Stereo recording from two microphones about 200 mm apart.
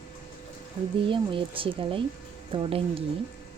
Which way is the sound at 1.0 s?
25° right (ahead or behind).